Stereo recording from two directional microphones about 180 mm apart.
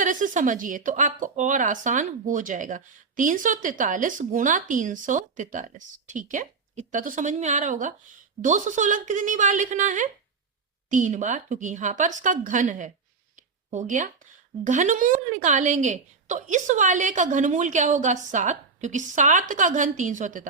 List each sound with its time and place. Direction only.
0.0 s speech: 45° right (ahead or behind)
13.3 s a sound: 45° right (ahead or behind)
14.6 s speech: 45° right (ahead or behind)